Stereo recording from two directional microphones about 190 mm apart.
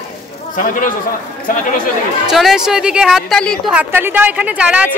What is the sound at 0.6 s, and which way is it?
Speech, 45° left (ahead or behind).